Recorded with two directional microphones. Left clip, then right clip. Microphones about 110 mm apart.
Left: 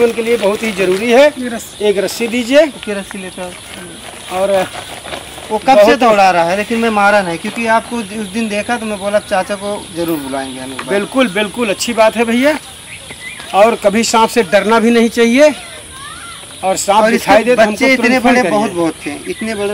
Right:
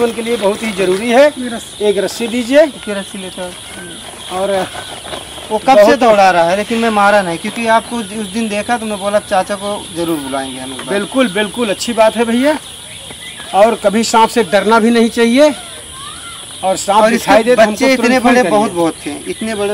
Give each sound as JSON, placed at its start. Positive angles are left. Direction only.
{"t": 0.0, "sound": "speech", "side_deg": 0}
{"t": 2.9, "sound": "speech", "side_deg": -20}
{"t": 4.3, "sound": "speech", "side_deg": 5}
{"t": 5.5, "sound": "speech", "side_deg": -15}
{"t": 10.9, "sound": "speech", "side_deg": 0}
{"t": 16.6, "sound": "speech", "side_deg": 0}
{"t": 17.0, "sound": "speech", "side_deg": -15}